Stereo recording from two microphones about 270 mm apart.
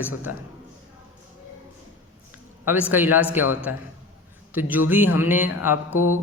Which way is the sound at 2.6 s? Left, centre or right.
Centre.